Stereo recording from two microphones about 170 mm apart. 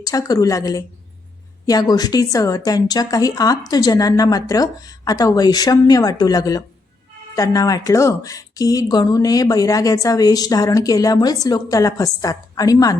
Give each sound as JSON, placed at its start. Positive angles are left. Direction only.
{"t": 0.0, "sound": "speech", "side_deg": 20}